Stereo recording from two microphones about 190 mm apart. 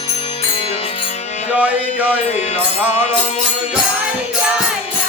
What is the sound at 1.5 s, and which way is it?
Music, 5° right (ahead or behind).